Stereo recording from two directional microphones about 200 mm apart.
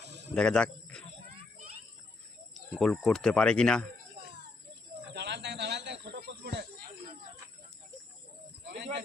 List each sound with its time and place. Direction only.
0.3 s speech: 5° left (ahead or behind)
2.7 s speech: centre (ahead or behind)
5.1 s snake: 60° right (ahead or behind)
8.6 s a sound: 60° right (ahead or behind)